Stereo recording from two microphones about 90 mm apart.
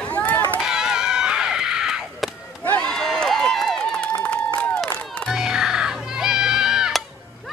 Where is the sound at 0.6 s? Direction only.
5° right (ahead or behind).